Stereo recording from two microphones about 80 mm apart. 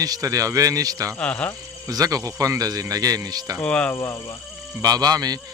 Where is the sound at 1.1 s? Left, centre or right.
Centre.